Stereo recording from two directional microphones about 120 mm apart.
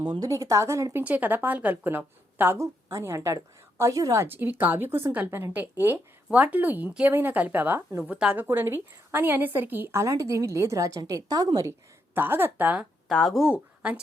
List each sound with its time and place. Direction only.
0.0 s a woman's voice: 40° right (ahead or behind)
0.3 s a woman's voice: 25° right (ahead or behind)
1.0 s a woman's voice: 15° right (ahead or behind)
8.4 s a woman's voice: 20° right (ahead or behind)
12.1 s a woman's voice: 20° right (ahead or behind)
13.1 s speech: centre (ahead or behind)
13.5 s speech: 10° right (ahead or behind)